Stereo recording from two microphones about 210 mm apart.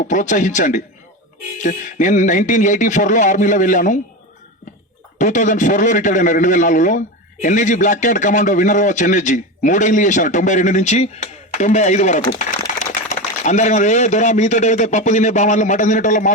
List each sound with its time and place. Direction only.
0.0 s a man's voice: 35° left (ahead or behind)
5.1 s a man's voice: 35° left (ahead or behind)